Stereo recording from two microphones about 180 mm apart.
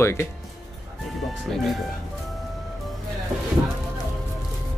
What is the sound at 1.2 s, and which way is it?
Speech, centre (ahead or behind).